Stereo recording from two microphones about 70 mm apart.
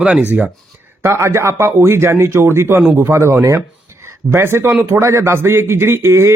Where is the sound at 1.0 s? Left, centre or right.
Right.